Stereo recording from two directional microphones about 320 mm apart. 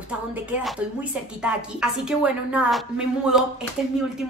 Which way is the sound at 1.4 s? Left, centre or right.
Centre.